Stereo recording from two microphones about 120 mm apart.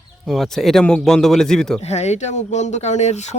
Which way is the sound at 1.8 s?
65° left (ahead or behind).